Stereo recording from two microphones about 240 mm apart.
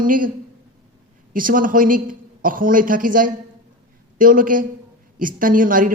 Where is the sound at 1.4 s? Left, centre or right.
Right.